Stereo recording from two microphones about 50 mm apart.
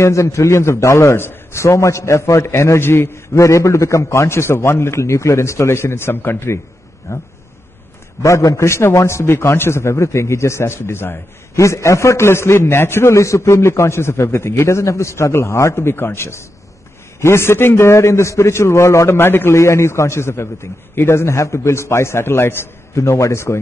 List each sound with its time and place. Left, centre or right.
0.0 s a man's voice: left
3.3 s a man's voice: left
7.1 s a man's voice: left
11.5 s a man's voice: left
19.0 s a man's voice: left
19.5 s a man's voice: left
22.9 s a man's voice: left